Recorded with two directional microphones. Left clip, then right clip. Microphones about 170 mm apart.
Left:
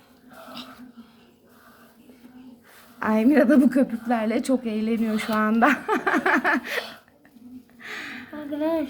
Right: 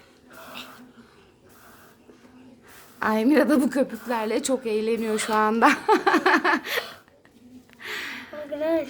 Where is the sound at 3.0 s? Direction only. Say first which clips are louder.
Left 1 dB; 10° right (ahead or behind).